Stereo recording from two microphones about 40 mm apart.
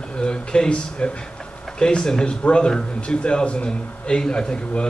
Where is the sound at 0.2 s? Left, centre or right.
Left.